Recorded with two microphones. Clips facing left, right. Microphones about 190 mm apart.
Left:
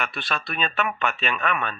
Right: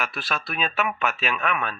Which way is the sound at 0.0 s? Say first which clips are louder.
Even; centre (ahead or behind).